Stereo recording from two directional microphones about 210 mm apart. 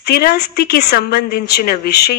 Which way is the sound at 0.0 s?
45° left (ahead or behind).